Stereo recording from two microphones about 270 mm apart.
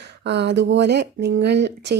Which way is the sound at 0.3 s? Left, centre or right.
Right.